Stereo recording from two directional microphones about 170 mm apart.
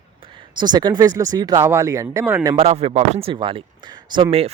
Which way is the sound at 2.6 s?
35° right (ahead or behind).